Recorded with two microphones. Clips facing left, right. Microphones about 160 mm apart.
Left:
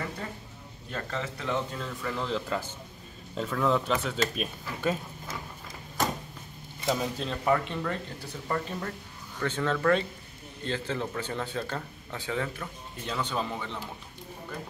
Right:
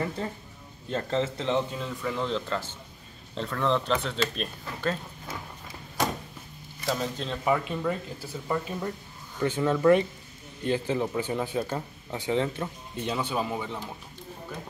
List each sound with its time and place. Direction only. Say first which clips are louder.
0.8 s speech: right 7 dB; 30° right (ahead or behind)
1.7 s speech: right 2 dB; 5° right (ahead or behind)
6.9 s speech: even; 10° left (ahead or behind)
7.4 s speech: right 1 dB; 5° right (ahead or behind)